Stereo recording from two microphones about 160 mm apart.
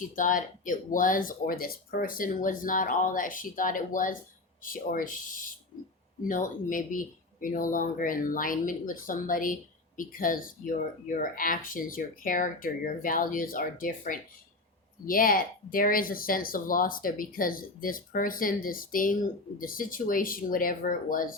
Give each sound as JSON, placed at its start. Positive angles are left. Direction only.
{"t": 0.0, "sound": "speech", "side_deg": 55}